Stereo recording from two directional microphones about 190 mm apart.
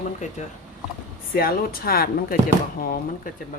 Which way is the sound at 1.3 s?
50° left (ahead or behind).